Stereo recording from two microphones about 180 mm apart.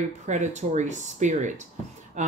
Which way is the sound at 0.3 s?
40° right (ahead or behind).